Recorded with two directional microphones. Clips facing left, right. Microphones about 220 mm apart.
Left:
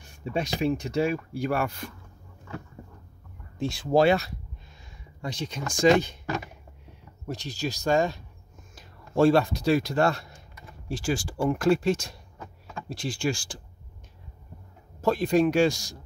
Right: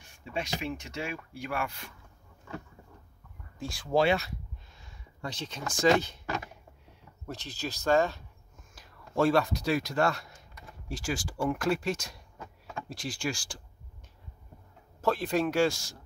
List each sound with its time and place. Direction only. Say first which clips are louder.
0.2 s speech: left 8 dB; 40° left (ahead or behind)
3.5 s speech: left 9 dB; 25° left (ahead or behind)
3.9 s speech: left 5 dB; 40° left (ahead or behind)
5.2 s speech: left 4 dB; 15° left (ahead or behind)
7.2 s speech: left 6 dB; 15° left (ahead or behind)
8.7 s speech: left 4 dB; 25° left (ahead or behind)
15.0 s speech: left 6 dB; 15° left (ahead or behind)